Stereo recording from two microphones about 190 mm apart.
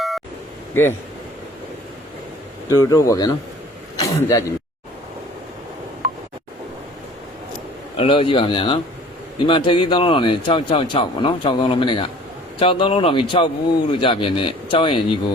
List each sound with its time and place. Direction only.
0.7 s speech: 10° left (ahead or behind)
2.6 s speech: 15° left (ahead or behind)
7.9 s a man's voice: 30° left (ahead or behind)